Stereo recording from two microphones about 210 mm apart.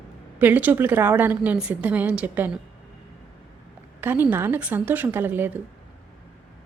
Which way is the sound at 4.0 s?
10° right (ahead or behind).